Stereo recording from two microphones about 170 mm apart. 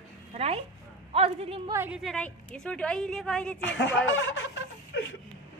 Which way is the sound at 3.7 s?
90° left.